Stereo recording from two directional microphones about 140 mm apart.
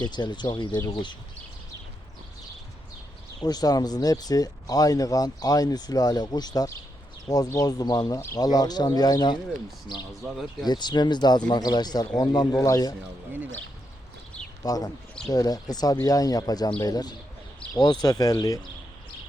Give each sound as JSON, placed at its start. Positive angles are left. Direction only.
{"t": 0.0, "sound": "speech", "side_deg": 30}
{"t": 3.4, "sound": "speech", "side_deg": 30}
{"t": 10.2, "sound": "speech", "side_deg": -5}
{"t": 10.7, "sound": "speech", "side_deg": 30}
{"t": 14.6, "sound": "speech", "side_deg": 25}